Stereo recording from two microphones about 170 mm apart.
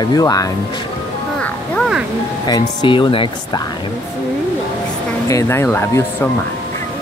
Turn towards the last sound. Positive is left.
turn(degrees=15)  # may be behind; listen again after turning